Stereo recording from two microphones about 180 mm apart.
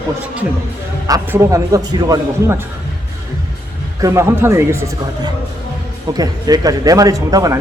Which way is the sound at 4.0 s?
15° right (ahead or behind).